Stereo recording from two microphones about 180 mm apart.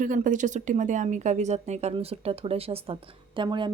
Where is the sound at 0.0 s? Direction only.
45° right (ahead or behind).